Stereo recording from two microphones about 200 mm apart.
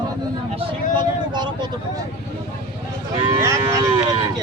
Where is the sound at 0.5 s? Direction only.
25° right (ahead or behind).